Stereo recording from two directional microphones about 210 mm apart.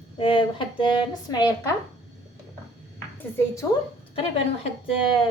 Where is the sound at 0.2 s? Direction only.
25° left (ahead or behind).